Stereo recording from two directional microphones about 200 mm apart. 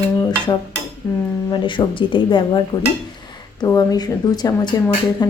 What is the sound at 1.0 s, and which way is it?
Dishes, 10° left (ahead or behind).